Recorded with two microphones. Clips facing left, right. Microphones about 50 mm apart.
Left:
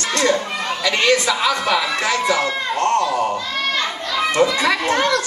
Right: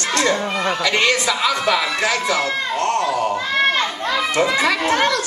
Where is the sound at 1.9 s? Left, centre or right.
Left.